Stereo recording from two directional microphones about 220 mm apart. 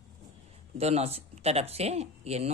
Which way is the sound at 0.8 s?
30° right (ahead or behind).